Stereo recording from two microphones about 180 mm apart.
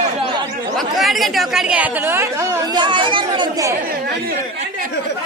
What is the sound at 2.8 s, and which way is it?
Speech, 25° right (ahead or behind).